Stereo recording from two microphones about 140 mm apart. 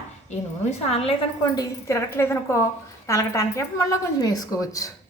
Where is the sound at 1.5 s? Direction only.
25° left (ahead or behind).